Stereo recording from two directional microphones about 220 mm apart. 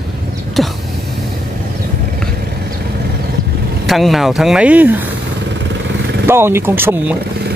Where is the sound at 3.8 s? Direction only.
Centre (ahead or behind).